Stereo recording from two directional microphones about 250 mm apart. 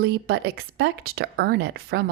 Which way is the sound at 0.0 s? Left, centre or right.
Right.